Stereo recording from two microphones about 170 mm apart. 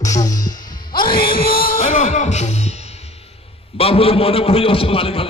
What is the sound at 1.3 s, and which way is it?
A man's voice, 60° left (ahead or behind).